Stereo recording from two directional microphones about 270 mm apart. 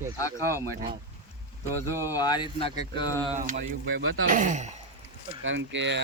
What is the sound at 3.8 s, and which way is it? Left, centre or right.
Speech, right.